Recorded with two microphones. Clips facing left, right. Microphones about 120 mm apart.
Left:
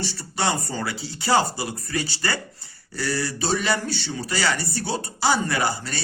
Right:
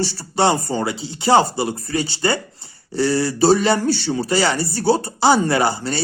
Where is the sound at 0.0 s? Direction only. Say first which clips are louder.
Right 8 dB; 35° right (ahead or behind).